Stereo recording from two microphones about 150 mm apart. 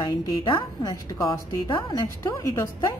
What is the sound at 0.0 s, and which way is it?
A woman's voice, 30° left (ahead or behind).